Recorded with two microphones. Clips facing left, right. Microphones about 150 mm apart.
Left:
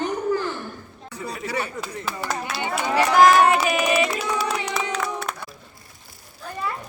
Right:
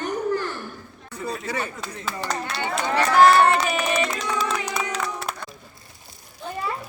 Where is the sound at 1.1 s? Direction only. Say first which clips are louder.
Even; 10° left (ahead or behind).